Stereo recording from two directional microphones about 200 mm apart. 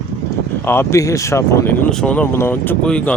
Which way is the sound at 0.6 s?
10° left (ahead or behind).